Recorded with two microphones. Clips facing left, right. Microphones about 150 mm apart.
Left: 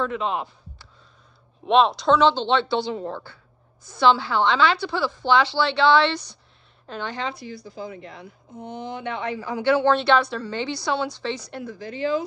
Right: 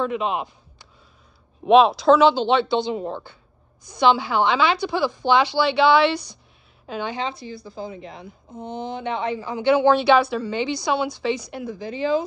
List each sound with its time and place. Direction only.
0.0 s speech: 15° right (ahead or behind)
1.7 s a woman's voice: 5° right (ahead or behind)
7.2 s speech: 25° right (ahead or behind)